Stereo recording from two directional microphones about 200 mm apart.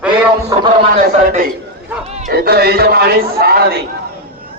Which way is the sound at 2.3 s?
50° right (ahead or behind).